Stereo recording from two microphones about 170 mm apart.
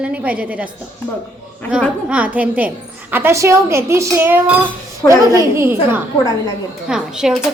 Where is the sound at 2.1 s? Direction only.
10° right (ahead or behind).